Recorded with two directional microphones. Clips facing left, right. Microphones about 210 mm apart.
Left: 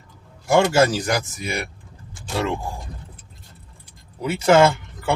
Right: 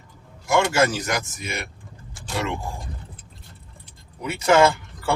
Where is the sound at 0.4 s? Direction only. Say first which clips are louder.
Left 3 dB; 35° left (ahead or behind).